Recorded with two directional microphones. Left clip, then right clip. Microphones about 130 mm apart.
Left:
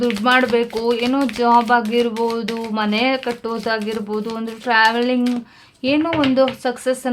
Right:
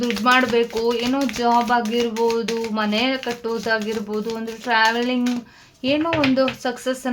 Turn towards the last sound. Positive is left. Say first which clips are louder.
# left 4 dB
turn(degrees=35)  # may be behind; listen again after turning